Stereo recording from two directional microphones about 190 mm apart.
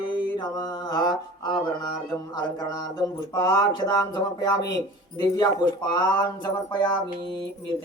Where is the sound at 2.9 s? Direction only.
20° left (ahead or behind).